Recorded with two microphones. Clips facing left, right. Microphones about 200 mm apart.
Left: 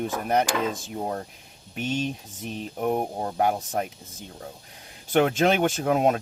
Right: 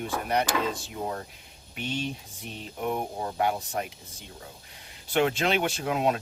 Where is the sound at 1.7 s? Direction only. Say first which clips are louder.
Left 4 dB; 45° left (ahead or behind).